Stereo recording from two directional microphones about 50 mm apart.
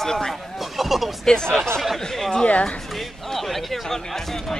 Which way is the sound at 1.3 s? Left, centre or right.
Centre.